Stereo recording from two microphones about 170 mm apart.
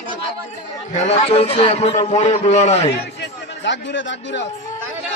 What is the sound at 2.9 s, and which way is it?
Speech, 90° left.